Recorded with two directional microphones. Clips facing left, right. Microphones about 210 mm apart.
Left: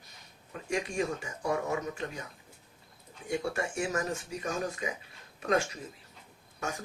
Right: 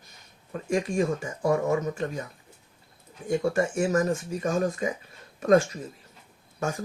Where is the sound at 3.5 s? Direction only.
45° right (ahead or behind).